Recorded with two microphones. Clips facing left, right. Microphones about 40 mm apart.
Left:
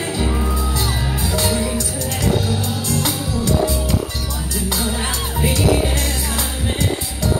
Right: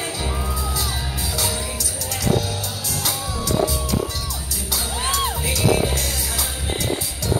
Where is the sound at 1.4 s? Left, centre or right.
Left.